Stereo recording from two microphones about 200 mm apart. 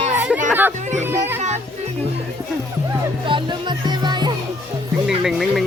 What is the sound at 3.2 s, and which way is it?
Music, 25° right (ahead or behind).